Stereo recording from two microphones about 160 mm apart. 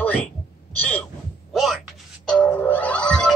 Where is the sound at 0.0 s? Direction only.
10° left (ahead or behind).